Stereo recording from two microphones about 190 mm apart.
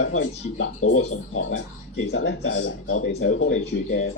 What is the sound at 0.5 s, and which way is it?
Speech, 85° left.